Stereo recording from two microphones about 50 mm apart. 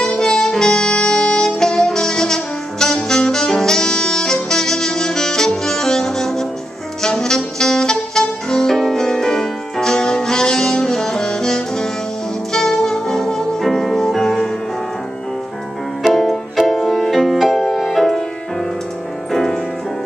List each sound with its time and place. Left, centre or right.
0.0 s saxophone: centre
7.0 s music: centre
16.0 s music: centre
19.3 s music: centre